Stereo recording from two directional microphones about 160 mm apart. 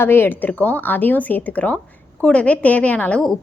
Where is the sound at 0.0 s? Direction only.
15° left (ahead or behind).